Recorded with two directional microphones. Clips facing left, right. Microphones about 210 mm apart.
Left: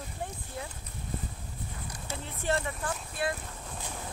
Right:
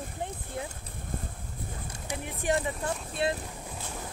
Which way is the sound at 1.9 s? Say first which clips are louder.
Right 5 dB; 15° right (ahead or behind).